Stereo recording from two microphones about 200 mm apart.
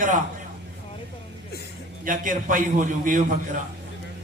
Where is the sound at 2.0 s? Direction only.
40° right (ahead or behind).